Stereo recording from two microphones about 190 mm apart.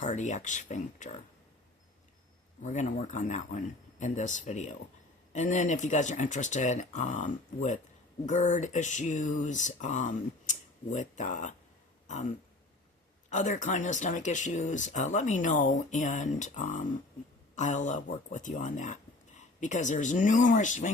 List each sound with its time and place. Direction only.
0.0 s speech: 40° left (ahead or behind)
2.6 s speech: 40° left (ahead or behind)
13.3 s speech: 40° left (ahead or behind)